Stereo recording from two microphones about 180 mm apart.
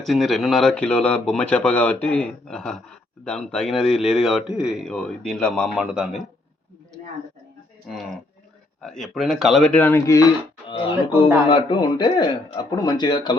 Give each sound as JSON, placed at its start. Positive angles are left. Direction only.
{"t": 0.0, "sound": "speech", "side_deg": 0}
{"t": 7.9, "sound": "speech", "side_deg": 0}
{"t": 10.7, "sound": "speech", "side_deg": 30}